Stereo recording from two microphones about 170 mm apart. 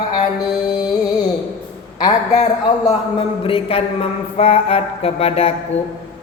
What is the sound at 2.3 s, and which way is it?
Mantra, 35° left (ahead or behind).